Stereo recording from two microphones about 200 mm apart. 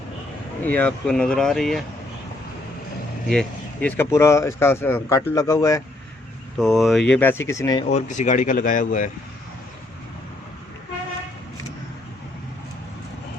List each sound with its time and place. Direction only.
0.6 s speech: 5° left (ahead or behind)
3.2 s speech: 5° left (ahead or behind)
6.6 s speech: centre (ahead or behind); by 7.9 s 15° left (ahead or behind)
7.9 s speech: 35° left (ahead or behind)